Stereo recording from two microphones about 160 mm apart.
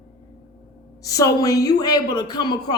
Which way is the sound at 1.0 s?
20° left (ahead or behind).